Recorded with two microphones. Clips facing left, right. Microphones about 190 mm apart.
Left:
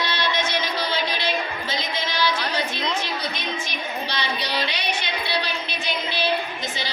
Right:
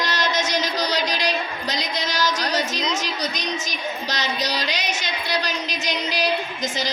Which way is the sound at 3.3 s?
40° right (ahead or behind).